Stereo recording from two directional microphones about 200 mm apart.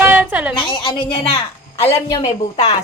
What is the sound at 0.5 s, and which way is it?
A woman's voice, 25° left (ahead or behind).